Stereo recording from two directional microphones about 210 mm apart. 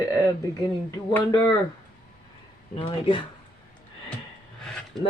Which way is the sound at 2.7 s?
25° left (ahead or behind).